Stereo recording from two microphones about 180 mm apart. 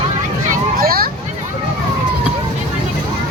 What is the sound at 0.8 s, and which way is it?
Hubbub, 55° right (ahead or behind).